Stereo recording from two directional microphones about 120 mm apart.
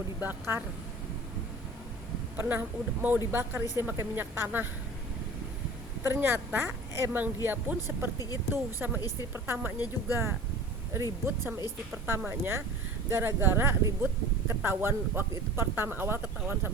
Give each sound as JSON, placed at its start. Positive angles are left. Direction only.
{"t": 0.2, "sound": "a woman's voice", "side_deg": -15}
{"t": 2.3, "sound": "a woman's voice", "side_deg": -15}
{"t": 6.0, "sound": "a woman's voice", "side_deg": -15}
{"t": 9.0, "sound": "a woman's voice", "side_deg": 30}
{"t": 9.3, "sound": "speech", "side_deg": -20}